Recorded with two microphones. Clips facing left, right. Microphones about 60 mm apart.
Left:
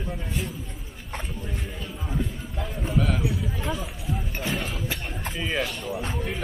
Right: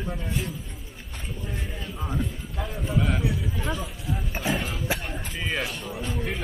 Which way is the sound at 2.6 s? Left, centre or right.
Centre.